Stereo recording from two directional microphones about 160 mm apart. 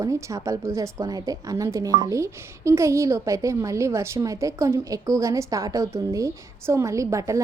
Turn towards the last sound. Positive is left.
turn(degrees=-20)  # may be behind; listen again after turning